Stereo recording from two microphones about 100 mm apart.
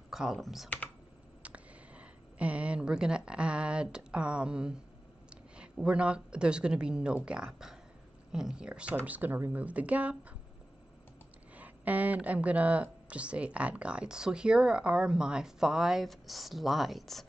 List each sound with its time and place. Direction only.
0.1 s speech: 5° right (ahead or behind)
1.4 s speech: 15° right (ahead or behind)
11.5 s speech: 15° right (ahead or behind); by 17.3 s centre (ahead or behind)